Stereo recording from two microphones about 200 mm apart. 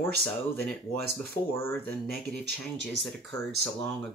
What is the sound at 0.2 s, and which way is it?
Speech, 5° left (ahead or behind).